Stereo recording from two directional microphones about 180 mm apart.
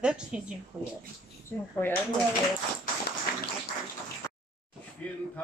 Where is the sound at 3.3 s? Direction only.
60° left (ahead or behind).